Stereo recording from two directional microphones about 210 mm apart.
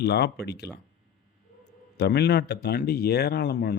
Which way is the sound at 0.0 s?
50° left (ahead or behind).